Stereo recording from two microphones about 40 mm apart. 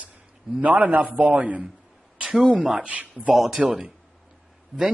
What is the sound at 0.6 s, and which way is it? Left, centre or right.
Speech, right.